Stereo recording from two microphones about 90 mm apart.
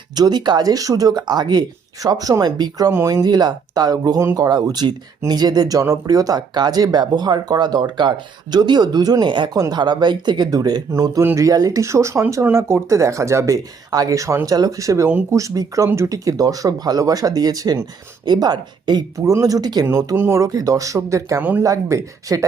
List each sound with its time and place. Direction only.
0.1 s speech: 50° right (ahead or behind)
19.2 s speech: 35° right (ahead or behind)